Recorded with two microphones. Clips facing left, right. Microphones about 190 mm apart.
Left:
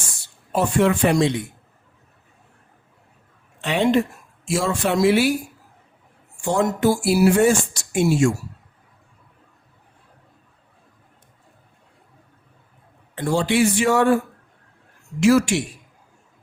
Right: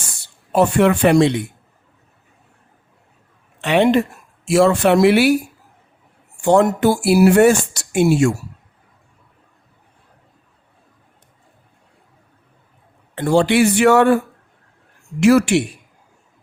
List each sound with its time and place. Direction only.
0.5 s a man's voice: 65° right (ahead or behind)
3.6 s a man's voice: 65° right (ahead or behind)
6.4 s speech: 65° right (ahead or behind)
13.1 s a man's voice: 65° right (ahead or behind)
15.2 s speech: 60° right (ahead or behind)